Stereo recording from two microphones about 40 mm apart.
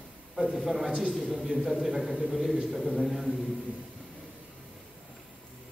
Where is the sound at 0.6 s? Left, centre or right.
Centre.